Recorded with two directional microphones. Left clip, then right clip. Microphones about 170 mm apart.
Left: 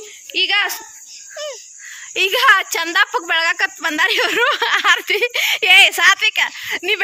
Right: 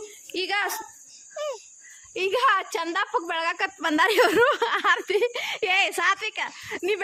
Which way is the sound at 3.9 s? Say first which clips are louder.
Left 3 dB; 35° right (ahead or behind).